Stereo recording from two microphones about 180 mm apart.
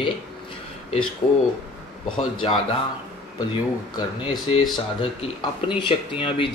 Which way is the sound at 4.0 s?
30° left (ahead or behind).